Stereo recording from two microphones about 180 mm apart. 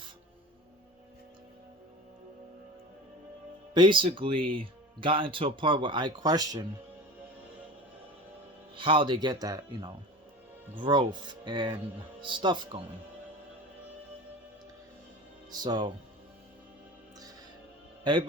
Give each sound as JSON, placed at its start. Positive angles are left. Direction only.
{"t": 3.8, "sound": "speech", "side_deg": -25}
{"t": 8.7, "sound": "speech", "side_deg": -30}
{"t": 15.5, "sound": "speech", "side_deg": -25}
{"t": 18.1, "sound": "speech", "side_deg": -25}